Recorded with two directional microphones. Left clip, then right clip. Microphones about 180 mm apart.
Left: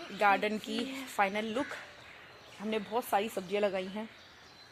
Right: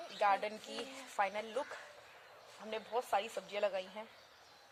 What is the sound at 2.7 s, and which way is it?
Speech, 45° left (ahead or behind).